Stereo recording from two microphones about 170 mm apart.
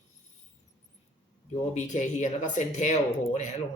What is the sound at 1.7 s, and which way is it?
Speech, 45° left (ahead or behind).